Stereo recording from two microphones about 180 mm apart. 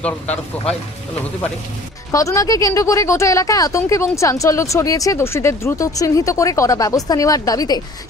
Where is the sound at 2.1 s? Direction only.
20° left (ahead or behind).